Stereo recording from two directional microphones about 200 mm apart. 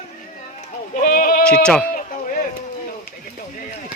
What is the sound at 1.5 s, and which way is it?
Bleat, 5° left (ahead or behind).